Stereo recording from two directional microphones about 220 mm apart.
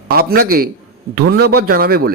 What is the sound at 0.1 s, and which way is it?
A man's voice, 45° right (ahead or behind).